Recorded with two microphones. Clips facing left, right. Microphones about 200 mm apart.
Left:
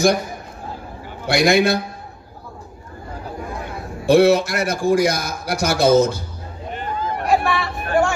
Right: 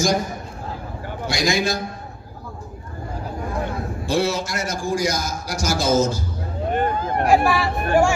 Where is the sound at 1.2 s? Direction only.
60° left (ahead or behind).